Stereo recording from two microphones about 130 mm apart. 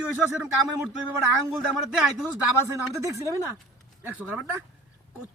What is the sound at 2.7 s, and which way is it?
Speech, 25° right (ahead or behind).